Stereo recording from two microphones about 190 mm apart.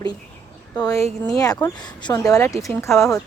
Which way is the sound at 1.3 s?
20° left (ahead or behind).